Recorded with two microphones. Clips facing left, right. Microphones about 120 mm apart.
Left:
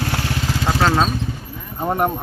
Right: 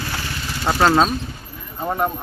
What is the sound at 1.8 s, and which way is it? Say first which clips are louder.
Speech: left 2 dB; 20° left (ahead or behind).